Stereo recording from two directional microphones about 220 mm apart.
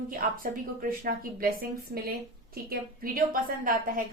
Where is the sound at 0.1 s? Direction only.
40° right (ahead or behind).